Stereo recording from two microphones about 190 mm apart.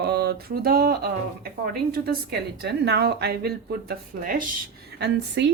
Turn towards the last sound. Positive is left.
turn(degrees=-65)  # may be behind; listen again after turning